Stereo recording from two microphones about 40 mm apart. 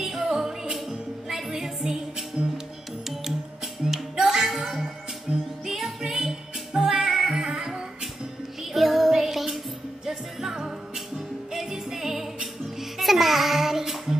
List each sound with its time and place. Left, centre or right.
0.0 s music: centre
4.2 s music: centre
5.3 s music: right
5.7 s music: centre
7.3 s music: centre
8.7 s music: centre